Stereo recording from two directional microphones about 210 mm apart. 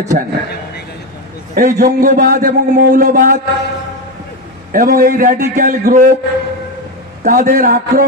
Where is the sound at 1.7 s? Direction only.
40° right (ahead or behind).